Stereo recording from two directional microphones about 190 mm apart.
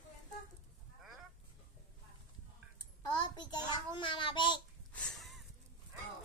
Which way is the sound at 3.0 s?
20° left (ahead or behind).